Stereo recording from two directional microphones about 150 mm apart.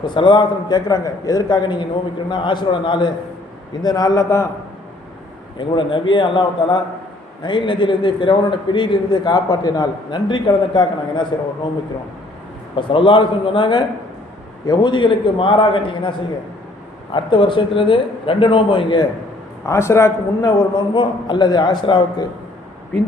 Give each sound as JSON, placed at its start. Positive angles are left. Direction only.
{"t": 0.0, "sound": "a man's voice", "side_deg": 30}
{"t": 5.5, "sound": "a man's voice", "side_deg": 30}
{"t": 12.7, "sound": "a man's voice", "side_deg": 35}
{"t": 19.6, "sound": "a man's voice", "side_deg": 20}